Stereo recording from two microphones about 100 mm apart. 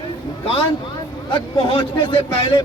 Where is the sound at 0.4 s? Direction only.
65° left (ahead or behind).